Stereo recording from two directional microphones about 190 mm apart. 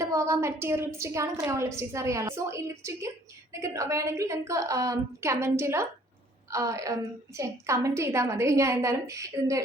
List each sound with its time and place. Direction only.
0.0 s a woman's voice: 15° right (ahead or behind)